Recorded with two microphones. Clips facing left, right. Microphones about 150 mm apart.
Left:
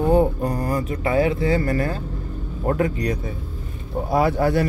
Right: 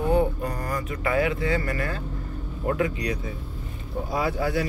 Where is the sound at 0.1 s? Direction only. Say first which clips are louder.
Left 4 dB; 35° left (ahead or behind).